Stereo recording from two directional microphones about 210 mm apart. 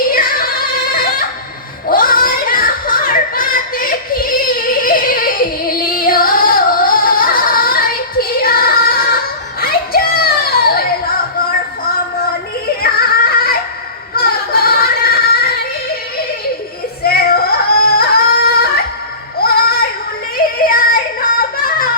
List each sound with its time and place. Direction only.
0.1 s female singing: 45° left (ahead or behind)
1.9 s a sound: 45° left (ahead or behind)
12.8 s music: 45° left (ahead or behind)
17.0 s yodeling: 45° left (ahead or behind)
19.4 s music: 45° left (ahead or behind)
20.7 s a sound: 45° left (ahead or behind)